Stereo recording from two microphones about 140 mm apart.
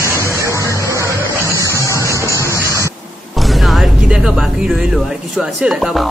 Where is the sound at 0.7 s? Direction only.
20° right (ahead or behind).